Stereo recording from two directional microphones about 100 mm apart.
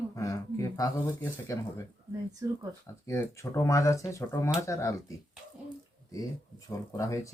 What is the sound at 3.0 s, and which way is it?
Speech, 30° left (ahead or behind).